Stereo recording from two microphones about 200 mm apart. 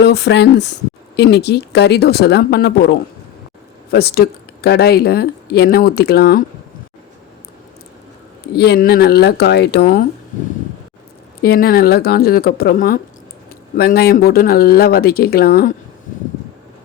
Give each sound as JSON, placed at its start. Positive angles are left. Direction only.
{"t": 0.0, "sound": "speech", "side_deg": 60}
{"t": 8.5, "sound": "speech", "side_deg": 55}
{"t": 11.4, "sound": "speech", "side_deg": 50}